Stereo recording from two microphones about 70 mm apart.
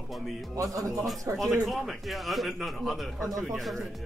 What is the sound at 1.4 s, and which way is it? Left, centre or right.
A man's voice, centre.